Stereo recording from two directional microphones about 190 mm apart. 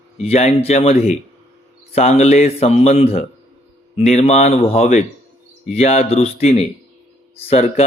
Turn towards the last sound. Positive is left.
turn(degrees=35)  # may be behind; listen again after turning